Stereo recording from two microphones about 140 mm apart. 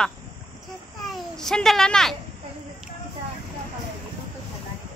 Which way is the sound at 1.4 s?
5° left (ahead or behind).